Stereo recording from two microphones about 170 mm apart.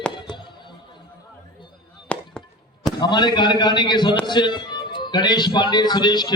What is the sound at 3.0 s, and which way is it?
A man's voice, 25° left (ahead or behind).